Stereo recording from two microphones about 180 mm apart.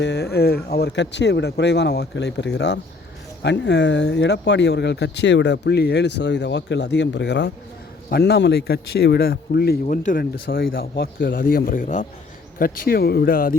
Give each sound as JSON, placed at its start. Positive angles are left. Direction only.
{"t": 0.0, "sound": "a man's voice", "side_deg": 65}
{"t": 9.8, "sound": "a man's voice", "side_deg": 45}
{"t": 10.8, "sound": "a man's voice", "side_deg": 60}